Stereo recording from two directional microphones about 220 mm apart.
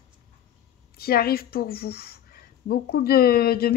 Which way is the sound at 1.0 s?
45° left (ahead or behind).